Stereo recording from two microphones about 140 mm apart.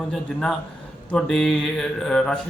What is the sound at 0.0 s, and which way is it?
Speech, 5° left (ahead or behind).